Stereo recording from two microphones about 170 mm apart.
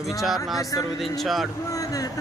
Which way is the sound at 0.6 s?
20° left (ahead or behind).